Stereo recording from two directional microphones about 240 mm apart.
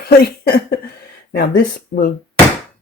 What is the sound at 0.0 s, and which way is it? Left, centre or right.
Speech, left.